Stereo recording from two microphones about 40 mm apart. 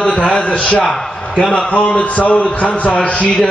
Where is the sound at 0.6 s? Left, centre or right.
Left.